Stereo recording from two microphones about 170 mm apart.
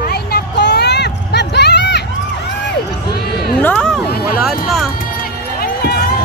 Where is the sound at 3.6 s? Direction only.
10° left (ahead or behind).